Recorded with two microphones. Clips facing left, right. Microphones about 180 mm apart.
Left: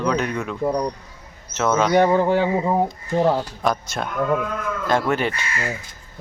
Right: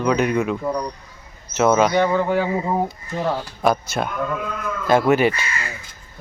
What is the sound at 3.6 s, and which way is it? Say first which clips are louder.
Speech: right 3 dB; 5° right (ahead or behind).